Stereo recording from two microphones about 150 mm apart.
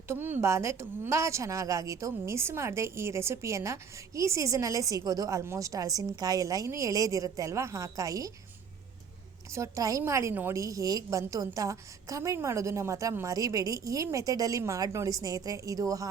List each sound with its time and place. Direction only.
0.1 s a woman's voice: 15° right (ahead or behind)
9.5 s speech: 20° right (ahead or behind)